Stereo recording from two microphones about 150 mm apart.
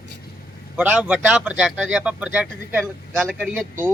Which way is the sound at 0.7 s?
10° right (ahead or behind).